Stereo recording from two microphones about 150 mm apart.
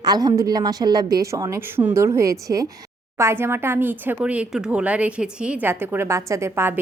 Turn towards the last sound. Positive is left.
turn(degrees=-15)  # may be behind; listen again after turning